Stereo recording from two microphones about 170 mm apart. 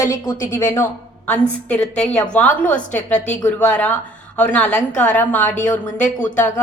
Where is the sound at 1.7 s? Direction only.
5° left (ahead or behind).